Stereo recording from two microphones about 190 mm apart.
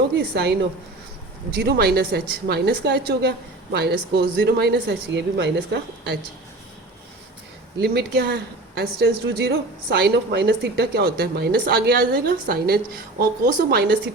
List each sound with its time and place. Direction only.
0.2 s a woman's voice: 60° right (ahead or behind)
7.8 s a woman's voice: 60° right (ahead or behind)